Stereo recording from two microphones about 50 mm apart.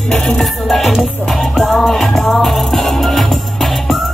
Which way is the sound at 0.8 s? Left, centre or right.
Centre.